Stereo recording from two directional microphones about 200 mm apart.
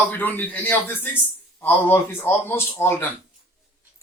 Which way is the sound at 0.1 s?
10° left (ahead or behind).